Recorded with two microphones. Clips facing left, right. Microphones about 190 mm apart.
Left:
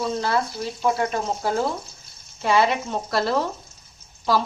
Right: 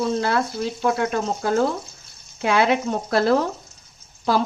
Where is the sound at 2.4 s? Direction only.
60° right (ahead or behind).